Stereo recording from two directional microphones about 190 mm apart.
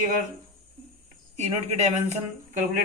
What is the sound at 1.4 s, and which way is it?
Speech, 35° right (ahead or behind).